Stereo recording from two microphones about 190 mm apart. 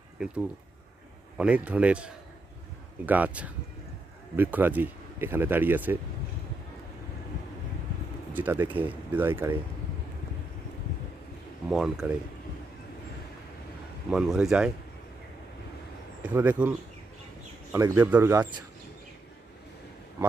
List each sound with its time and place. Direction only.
0.2 s speech: 5° right (ahead or behind)
1.4 s speech: 5° right (ahead or behind)
3.1 s speech: 10° right (ahead or behind)
8.3 s speech: 10° right (ahead or behind)
11.7 s speech: 5° right (ahead or behind)
14.1 s speech: 5° right (ahead or behind)
16.2 s speech: 10° right (ahead or behind)